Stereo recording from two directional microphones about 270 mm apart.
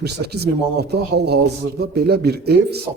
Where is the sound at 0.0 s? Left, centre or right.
Right.